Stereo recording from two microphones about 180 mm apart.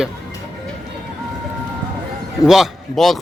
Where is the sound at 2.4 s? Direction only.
Centre (ahead or behind).